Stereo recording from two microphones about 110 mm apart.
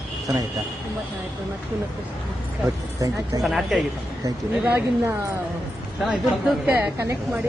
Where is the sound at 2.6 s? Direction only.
30° right (ahead or behind).